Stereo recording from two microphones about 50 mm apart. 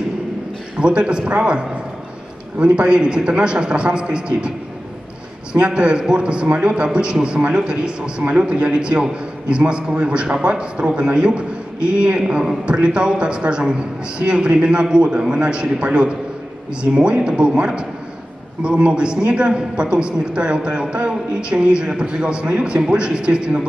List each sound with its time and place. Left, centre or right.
0.7 s a man's voice: centre
5.5 s a man's voice: right